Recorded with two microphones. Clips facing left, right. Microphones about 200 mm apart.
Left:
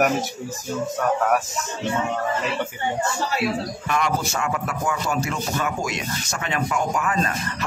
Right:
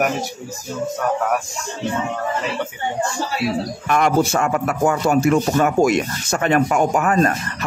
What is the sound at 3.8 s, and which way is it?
Speech, 55° right (ahead or behind).